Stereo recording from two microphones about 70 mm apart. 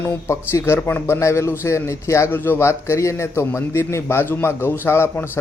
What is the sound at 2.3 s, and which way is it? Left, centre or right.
A man's voice, left.